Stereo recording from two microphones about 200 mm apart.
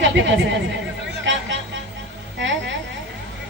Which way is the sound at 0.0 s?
65° right (ahead or behind).